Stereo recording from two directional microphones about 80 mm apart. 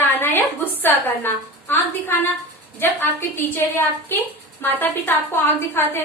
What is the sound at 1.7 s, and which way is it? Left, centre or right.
A woman's voice, left.